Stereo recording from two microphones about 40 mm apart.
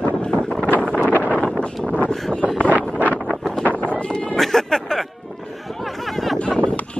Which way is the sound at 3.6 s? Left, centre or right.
Left.